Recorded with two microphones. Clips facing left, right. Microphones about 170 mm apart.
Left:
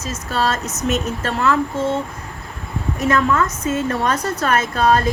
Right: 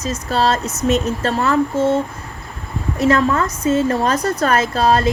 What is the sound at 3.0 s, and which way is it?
Speech, 30° right (ahead or behind).